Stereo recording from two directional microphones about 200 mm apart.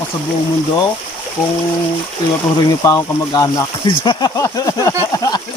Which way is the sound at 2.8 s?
15° left (ahead or behind).